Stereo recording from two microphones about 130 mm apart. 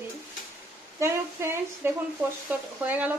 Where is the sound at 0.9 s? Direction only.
20° right (ahead or behind).